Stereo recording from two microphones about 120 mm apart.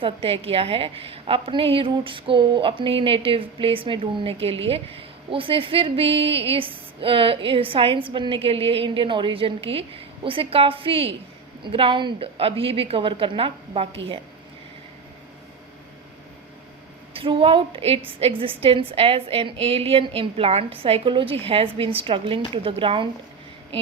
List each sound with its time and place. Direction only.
0.0 s a woman's voice: 55° right (ahead or behind)
17.2 s a woman's voice: 50° right (ahead or behind)